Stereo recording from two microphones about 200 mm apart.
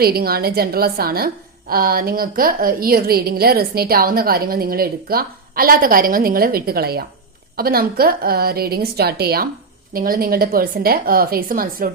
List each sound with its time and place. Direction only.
0.0 s a woman's voice: 50° right (ahead or behind)